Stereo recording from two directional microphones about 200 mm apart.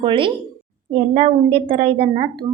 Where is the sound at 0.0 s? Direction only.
25° right (ahead or behind).